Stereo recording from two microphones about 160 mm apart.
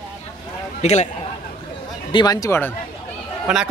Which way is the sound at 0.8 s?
45° left (ahead or behind).